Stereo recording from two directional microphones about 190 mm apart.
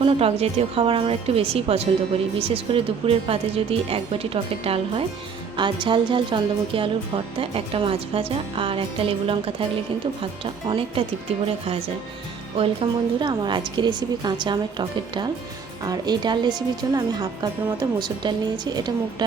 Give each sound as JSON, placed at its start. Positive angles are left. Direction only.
{"t": 0.0, "sound": "a woman's voice", "side_deg": -30}
{"t": 12.5, "sound": "a woman's voice", "side_deg": -25}